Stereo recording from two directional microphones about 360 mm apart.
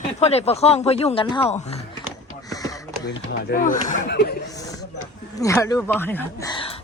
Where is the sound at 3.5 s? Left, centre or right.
Left.